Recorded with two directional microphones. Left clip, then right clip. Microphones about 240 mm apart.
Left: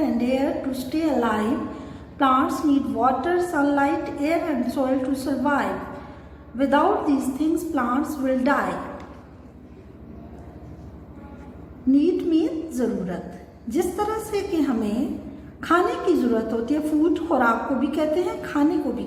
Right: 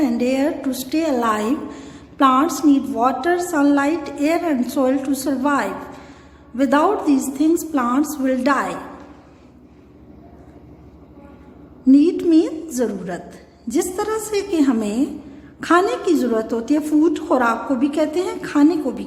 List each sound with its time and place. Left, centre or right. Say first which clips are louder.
0.0 s a woman's voice: right 4 dB; right
11.9 s a sound: right 6 dB; right
12.7 s a woman's voice: right 3 dB; right
16.0 s a woman's voice: right 3 dB; right